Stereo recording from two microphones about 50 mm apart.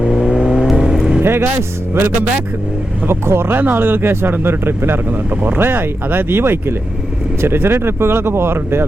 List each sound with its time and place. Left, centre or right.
0.0 s vehicle: centre
1.2 s speech: right